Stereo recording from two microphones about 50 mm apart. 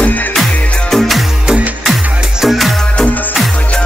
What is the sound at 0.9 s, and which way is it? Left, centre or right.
Music, centre.